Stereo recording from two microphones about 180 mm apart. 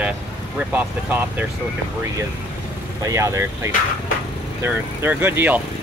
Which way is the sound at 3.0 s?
20° right (ahead or behind).